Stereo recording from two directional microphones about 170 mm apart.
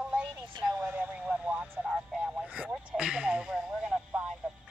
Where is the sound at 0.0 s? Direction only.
10° right (ahead or behind).